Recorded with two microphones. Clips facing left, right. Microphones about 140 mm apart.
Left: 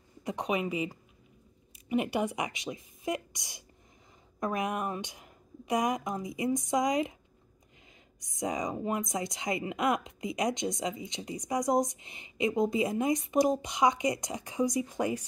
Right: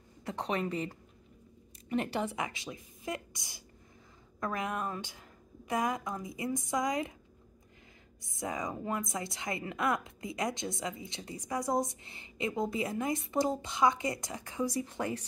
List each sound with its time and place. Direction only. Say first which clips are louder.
0.2 s a woman's voice: left 3 dB; 15° left (ahead or behind)
8.2 s a woman's voice: left 4 dB; 20° left (ahead or behind)